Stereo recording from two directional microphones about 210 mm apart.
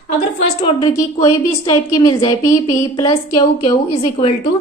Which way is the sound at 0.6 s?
15° left (ahead or behind).